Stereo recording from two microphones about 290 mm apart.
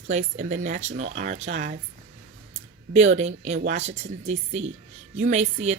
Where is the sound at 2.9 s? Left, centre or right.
Right.